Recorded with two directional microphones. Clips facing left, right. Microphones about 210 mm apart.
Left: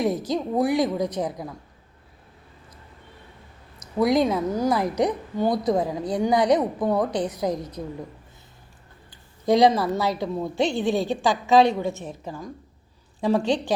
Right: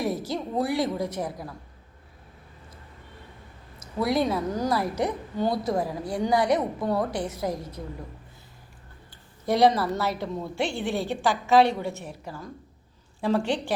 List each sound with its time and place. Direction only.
0.0 s a woman's voice: 20° left (ahead or behind)
4.0 s a woman's voice: 20° left (ahead or behind)
9.5 s a woman's voice: 15° left (ahead or behind)